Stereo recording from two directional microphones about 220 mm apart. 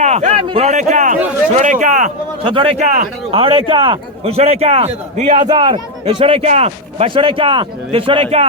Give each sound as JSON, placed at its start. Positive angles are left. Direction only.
{"t": 0.0, "sound": "speech", "side_deg": -30}
{"t": 2.4, "sound": "a man's voice", "side_deg": -25}
{"t": 3.3, "sound": "a man's voice", "side_deg": -25}